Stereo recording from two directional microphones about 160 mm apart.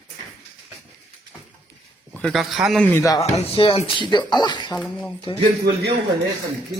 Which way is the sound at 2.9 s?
20° left (ahead or behind).